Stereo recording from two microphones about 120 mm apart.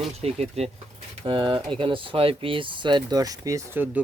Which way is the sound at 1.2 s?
45° right (ahead or behind).